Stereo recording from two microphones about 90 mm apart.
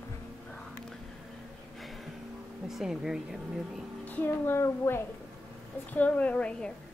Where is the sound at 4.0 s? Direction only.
20° left (ahead or behind).